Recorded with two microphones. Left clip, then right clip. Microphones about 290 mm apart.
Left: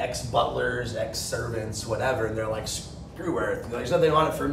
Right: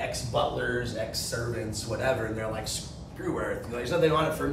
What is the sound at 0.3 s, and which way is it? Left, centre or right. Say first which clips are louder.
A man's voice: left 3 dB; centre.